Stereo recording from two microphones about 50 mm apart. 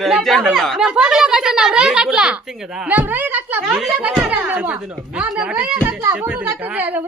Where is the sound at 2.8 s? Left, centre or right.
Right.